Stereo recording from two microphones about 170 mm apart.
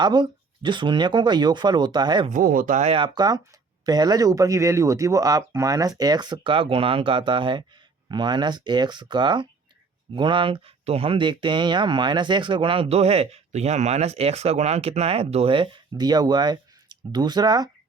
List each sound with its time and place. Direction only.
0.0 s speech: 25° right (ahead or behind)
2.3 s speech: 55° right (ahead or behind); by 17.7 s 25° right (ahead or behind)